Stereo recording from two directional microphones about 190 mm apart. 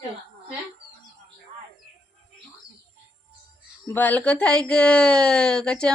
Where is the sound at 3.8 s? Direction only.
10° left (ahead or behind).